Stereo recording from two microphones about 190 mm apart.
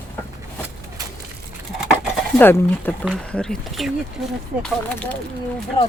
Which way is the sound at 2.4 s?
10° left (ahead or behind).